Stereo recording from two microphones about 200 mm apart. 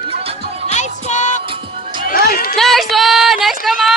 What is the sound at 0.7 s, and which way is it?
Music, 35° left (ahead or behind).